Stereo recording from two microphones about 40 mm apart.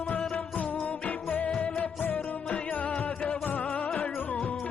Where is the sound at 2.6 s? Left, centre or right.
Left.